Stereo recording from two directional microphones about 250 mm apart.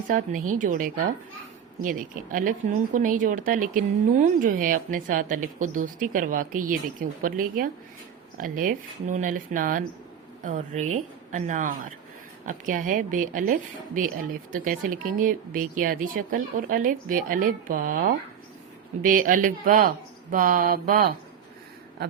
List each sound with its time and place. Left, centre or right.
0.6 s a woman's voice: right